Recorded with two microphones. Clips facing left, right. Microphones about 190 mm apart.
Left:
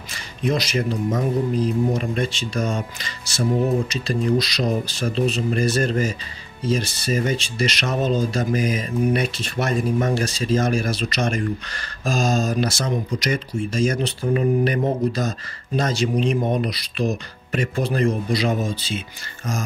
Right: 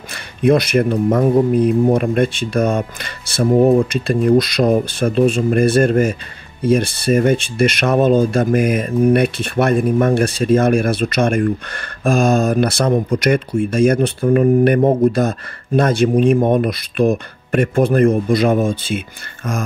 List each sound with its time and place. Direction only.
0.1 s speech: 55° right (ahead or behind)